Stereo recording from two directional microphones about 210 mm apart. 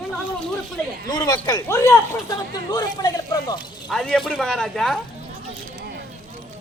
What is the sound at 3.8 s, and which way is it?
Speech, 5° left (ahead or behind).